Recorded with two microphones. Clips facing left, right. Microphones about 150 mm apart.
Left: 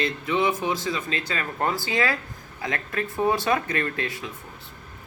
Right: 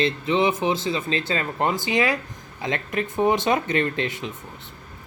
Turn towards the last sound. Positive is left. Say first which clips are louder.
# right 4 dB
turn(degrees=-20)  # may be behind; listen again after turning